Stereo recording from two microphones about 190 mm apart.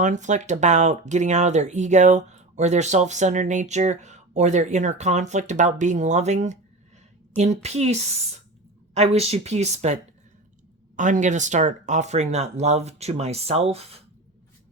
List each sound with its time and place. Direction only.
0.0 s speech: 40° right (ahead or behind)